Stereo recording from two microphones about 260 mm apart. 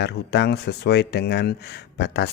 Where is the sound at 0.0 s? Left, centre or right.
Left.